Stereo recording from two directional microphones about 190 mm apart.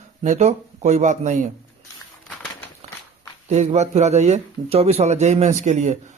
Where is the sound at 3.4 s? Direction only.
35° right (ahead or behind).